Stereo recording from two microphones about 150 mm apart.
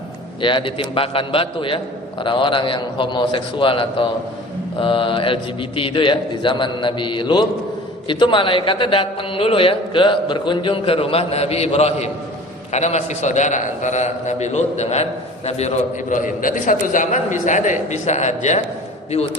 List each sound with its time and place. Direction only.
0.4 s a man's voice: 35° left (ahead or behind); by 18.6 s 50° left (ahead or behind)